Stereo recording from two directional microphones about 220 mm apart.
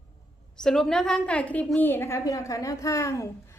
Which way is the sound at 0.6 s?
Centre (ahead or behind).